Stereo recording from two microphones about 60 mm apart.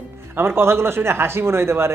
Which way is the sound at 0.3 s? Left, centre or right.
Right.